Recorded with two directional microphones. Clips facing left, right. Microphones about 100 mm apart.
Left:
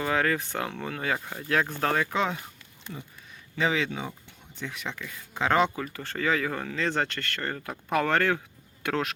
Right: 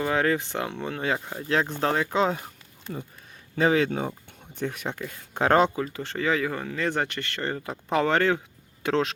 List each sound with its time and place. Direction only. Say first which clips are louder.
0.0 s speech: right 2 dB; 20° right (ahead or behind); by 5.7 s 40° right (ahead or behind)
5.7 s speech: right 4 dB; 25° right (ahead or behind)